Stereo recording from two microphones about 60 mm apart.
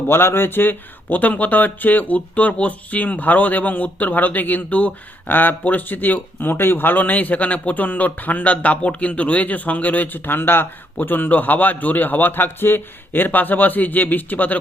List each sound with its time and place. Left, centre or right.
0.1 s a man's voice: left